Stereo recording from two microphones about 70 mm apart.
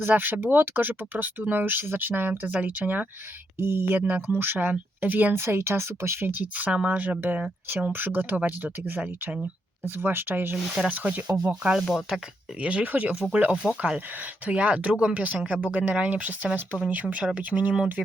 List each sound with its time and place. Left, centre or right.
0.0 s speech: right
3.6 s speech: right
11.4 s speech: centre
12.5 s speech: centre